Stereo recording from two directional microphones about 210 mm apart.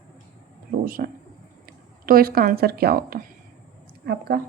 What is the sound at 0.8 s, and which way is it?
A woman's voice, 45° right (ahead or behind).